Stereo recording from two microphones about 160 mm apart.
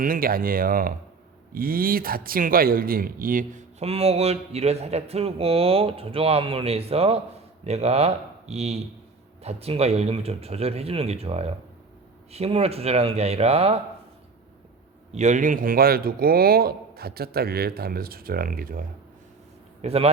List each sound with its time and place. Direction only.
0.0 s a man's voice: 65° right (ahead or behind)
3.8 s a man's voice: 40° right (ahead or behind)
15.1 s speech: 50° right (ahead or behind)
19.8 s speech: 40° right (ahead or behind)